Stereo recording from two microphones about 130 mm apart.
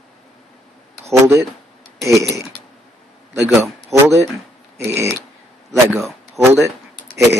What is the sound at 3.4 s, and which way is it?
Speech, 20° right (ahead or behind).